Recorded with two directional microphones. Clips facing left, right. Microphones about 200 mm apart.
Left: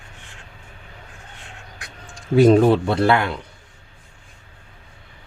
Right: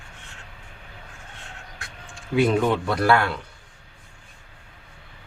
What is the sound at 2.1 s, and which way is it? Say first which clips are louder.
Speech: left 7 dB; 40° left (ahead or behind).